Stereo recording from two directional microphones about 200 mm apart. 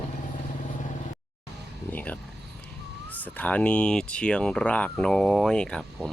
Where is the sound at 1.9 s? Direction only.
10° left (ahead or behind).